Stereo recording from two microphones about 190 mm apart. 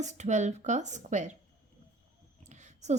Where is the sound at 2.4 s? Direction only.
40° right (ahead or behind).